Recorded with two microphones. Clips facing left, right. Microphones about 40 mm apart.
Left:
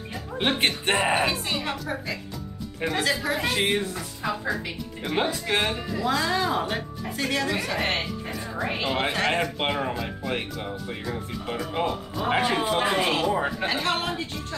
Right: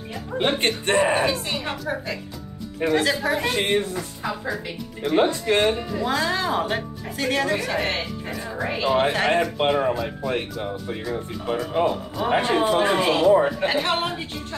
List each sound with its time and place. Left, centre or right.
0.1 s speech: centre
1.7 s a woman's voice: centre
5.7 s a woman's voice: centre
8.0 s a woman's voice: centre
9.3 s speech: centre
13.7 s a woman's voice: centre